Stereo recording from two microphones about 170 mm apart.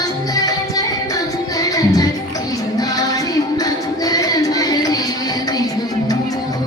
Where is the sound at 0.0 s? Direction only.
20° left (ahead or behind).